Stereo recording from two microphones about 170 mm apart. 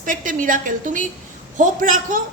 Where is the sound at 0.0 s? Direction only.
50° right (ahead or behind).